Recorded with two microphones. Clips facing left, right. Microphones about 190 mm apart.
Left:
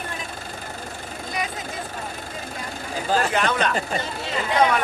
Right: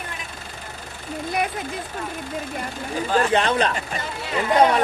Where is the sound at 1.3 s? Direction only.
60° right (ahead or behind).